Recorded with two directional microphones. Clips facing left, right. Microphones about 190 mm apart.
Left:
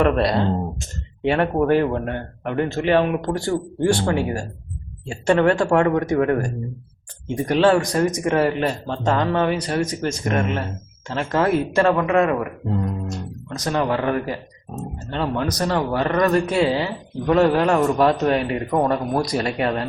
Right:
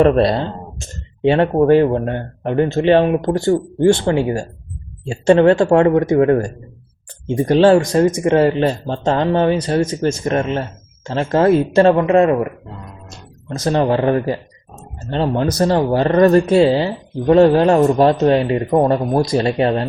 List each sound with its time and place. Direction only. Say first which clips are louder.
0.0 s speech: right 5 dB; 30° right (ahead or behind)
13.5 s speech: right 6 dB; 30° right (ahead or behind)